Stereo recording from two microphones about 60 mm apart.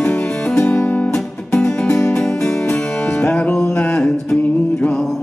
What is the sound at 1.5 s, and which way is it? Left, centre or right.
Music, centre.